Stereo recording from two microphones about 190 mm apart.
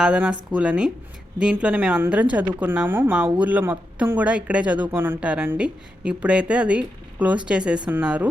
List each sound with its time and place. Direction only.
0.0 s a woman's voice: 5° right (ahead or behind)